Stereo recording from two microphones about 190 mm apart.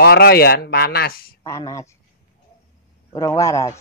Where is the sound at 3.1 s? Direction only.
15° left (ahead or behind).